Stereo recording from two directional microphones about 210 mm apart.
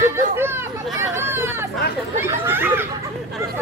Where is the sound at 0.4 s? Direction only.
10° right (ahead or behind).